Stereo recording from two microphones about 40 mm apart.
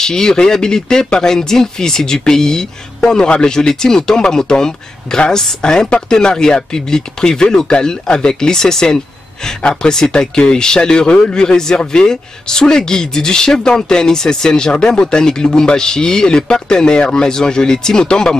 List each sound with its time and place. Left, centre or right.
0.0 s speech: centre